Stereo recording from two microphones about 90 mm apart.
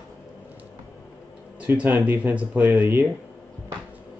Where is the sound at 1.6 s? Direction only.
20° right (ahead or behind).